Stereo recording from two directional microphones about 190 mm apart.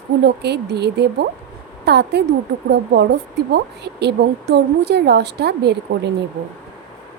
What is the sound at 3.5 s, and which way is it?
A woman's voice, 60° right (ahead or behind).